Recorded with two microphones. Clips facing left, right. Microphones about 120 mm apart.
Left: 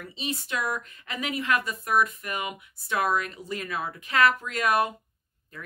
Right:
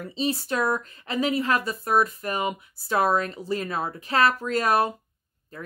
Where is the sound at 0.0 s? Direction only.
35° right (ahead or behind).